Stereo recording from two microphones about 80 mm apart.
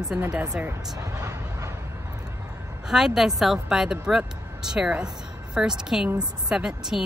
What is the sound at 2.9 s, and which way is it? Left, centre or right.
Speech, centre.